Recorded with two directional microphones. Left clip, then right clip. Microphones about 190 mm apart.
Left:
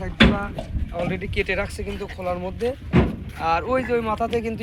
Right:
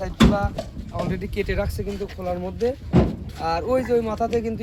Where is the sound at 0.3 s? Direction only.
70° right (ahead or behind).